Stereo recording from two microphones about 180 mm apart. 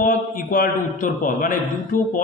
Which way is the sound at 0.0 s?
50° left (ahead or behind).